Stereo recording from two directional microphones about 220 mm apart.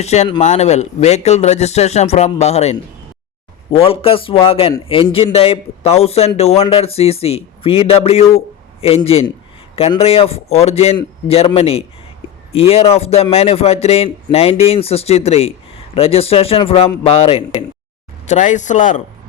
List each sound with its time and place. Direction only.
0.0 s a man's voice: 30° left (ahead or behind)